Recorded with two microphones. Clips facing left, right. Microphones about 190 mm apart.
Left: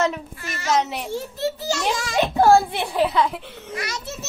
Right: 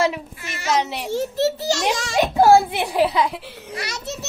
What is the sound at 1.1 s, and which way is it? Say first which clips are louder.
Speech: right 7 dB; 85° right.